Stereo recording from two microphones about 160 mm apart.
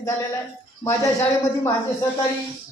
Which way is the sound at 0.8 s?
15° left (ahead or behind).